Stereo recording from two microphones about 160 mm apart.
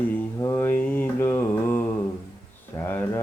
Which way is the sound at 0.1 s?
15° left (ahead or behind).